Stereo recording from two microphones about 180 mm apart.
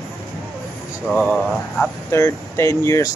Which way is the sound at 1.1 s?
5° left (ahead or behind).